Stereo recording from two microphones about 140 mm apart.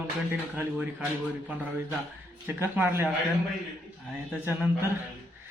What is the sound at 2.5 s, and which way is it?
Speech, 15° right (ahead or behind).